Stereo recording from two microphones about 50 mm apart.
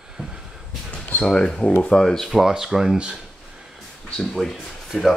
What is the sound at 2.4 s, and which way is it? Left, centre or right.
Speech, centre.